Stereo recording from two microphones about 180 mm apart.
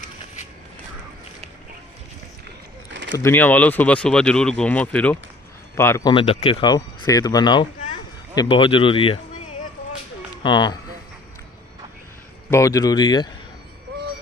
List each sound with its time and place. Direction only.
2.9 s a sound: 90° right
3.2 s speech: 10° left (ahead or behind)
6.1 s speech: 30° left (ahead or behind)
10.4 s speech: 25° left (ahead or behind)
12.4 s speech: 15° left (ahead or behind)